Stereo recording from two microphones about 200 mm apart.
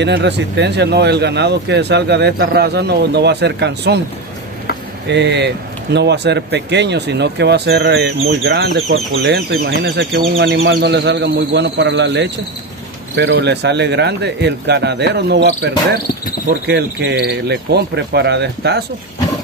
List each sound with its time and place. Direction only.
0.0 s speech: 60° right (ahead or behind)
5.0 s speech: 60° right (ahead or behind)
8.9 s speech: 80° right
9.8 s speech: 60° right (ahead or behind)